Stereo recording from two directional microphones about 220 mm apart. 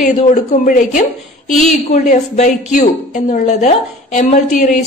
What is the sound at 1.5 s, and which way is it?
Speech, centre (ahead or behind).